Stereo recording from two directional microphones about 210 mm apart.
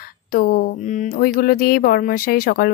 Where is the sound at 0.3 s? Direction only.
45° left (ahead or behind).